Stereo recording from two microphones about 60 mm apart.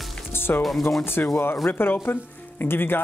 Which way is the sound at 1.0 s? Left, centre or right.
Left.